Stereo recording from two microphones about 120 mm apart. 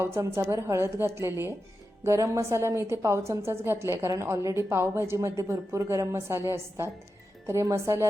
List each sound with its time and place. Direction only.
0.0 s a woman's voice: 25° right (ahead or behind)